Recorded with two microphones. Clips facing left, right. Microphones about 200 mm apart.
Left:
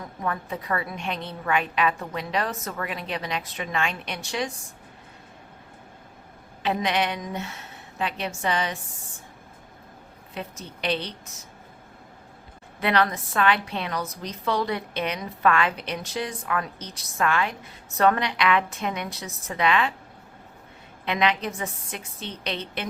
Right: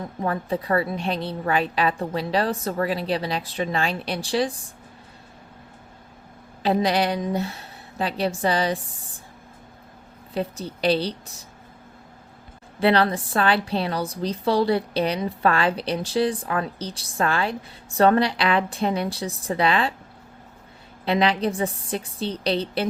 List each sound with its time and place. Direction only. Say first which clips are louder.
0.0 s a woman's voice: right 4 dB; 30° right (ahead or behind)
6.6 s a woman's voice: right 4 dB; 35° right (ahead or behind)
10.3 s a woman's voice: right 8 dB; 35° right (ahead or behind)
12.8 s a woman's voice: right 4 dB; 30° right (ahead or behind)
21.0 s a woman's voice: right 4 dB; 35° right (ahead or behind)